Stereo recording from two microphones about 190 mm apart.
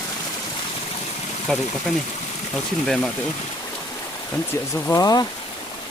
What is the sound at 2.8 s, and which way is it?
Speech, 5° left (ahead or behind).